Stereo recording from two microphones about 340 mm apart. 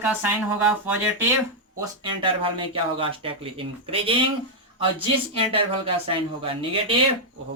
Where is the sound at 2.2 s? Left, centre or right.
Centre.